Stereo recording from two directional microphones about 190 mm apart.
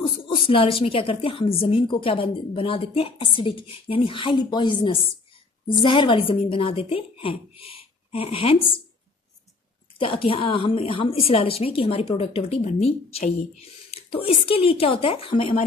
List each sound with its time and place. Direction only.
0.0 s a woman's voice: 25° left (ahead or behind)
9.9 s a woman's voice: 30° left (ahead or behind)